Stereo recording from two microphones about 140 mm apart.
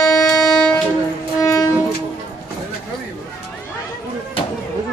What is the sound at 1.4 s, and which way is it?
Train, 20° left (ahead or behind).